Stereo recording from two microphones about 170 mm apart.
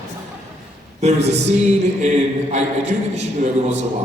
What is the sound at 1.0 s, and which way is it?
A man's voice, 40° right (ahead or behind).